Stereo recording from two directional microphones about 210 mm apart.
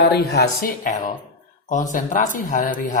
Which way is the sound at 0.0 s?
50° left (ahead or behind).